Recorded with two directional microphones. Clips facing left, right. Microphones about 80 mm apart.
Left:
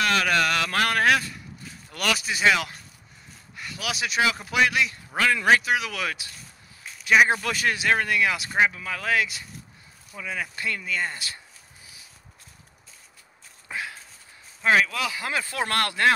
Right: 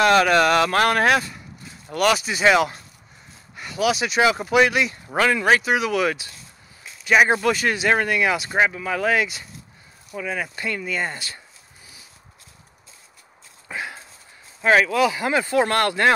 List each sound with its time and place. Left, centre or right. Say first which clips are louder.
0.0 s speech: right 7 dB; centre
14.6 s speech: right 4 dB; centre
15.0 s speech: right 10 dB; right
15.2 s speech: right 8 dB; centre